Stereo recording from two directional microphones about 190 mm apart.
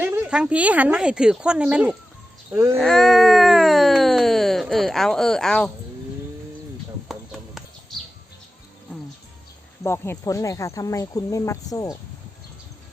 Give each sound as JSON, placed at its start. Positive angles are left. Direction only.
{"t": 0.0, "sound": "a woman's voice", "side_deg": -10}
{"t": 2.7, "sound": "a sound", "side_deg": 0}
{"t": 7.1, "sound": "clip-clop", "side_deg": 0}
{"t": 9.8, "sound": "speech", "side_deg": 15}